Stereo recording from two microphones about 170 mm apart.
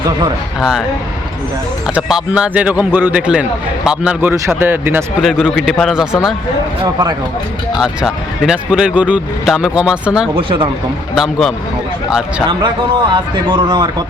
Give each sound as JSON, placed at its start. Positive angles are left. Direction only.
{"t": 0.6, "sound": "speech", "side_deg": 0}
{"t": 2.0, "sound": "a man's voice", "side_deg": -5}
{"t": 5.2, "sound": "speech", "side_deg": 0}
{"t": 7.8, "sound": "speech", "side_deg": -5}
{"t": 10.3, "sound": "speech", "side_deg": -30}
{"t": 11.1, "sound": "speech", "side_deg": 0}
{"t": 13.5, "sound": "speech", "side_deg": -25}